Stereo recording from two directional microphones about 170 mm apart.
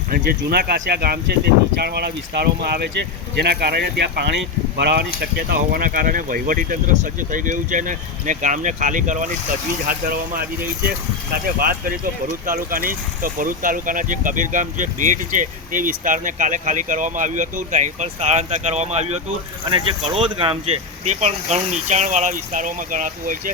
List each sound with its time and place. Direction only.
0.1 s speech: 65° right (ahead or behind)
5.2 s speech: 65° right (ahead or behind); by 19.2 s 40° right (ahead or behind)
19.7 s speech: 30° right (ahead or behind); by 23.4 s 50° right (ahead or behind)